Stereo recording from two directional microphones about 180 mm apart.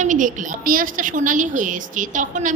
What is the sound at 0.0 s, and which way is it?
A woman's voice, 45° right (ahead or behind).